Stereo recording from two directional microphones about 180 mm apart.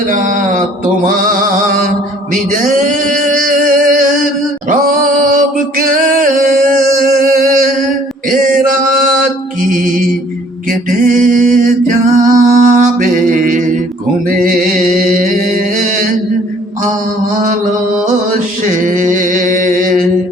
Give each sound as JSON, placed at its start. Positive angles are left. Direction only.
{"t": 0.1, "sound": "mantra", "side_deg": -45}
{"t": 1.6, "sound": "mantra", "side_deg": -50}
{"t": 2.3, "sound": "a sound", "side_deg": -45}
{"t": 5.7, "sound": "music", "side_deg": -50}
{"t": 8.3, "sound": "mantra", "side_deg": -50}
{"t": 10.7, "sound": "a sound", "side_deg": -50}
{"t": 12.2, "sound": "music", "side_deg": -45}
{"t": 18.8, "sound": "mantra", "side_deg": -45}